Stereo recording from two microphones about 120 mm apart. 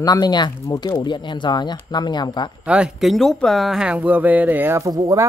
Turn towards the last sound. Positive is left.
turn(degrees=-30)  # may be behind; listen again after turning